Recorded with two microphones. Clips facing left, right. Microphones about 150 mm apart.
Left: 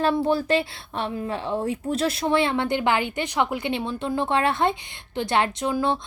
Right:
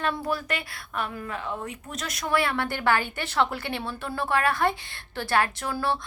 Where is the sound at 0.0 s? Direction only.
30° left (ahead or behind).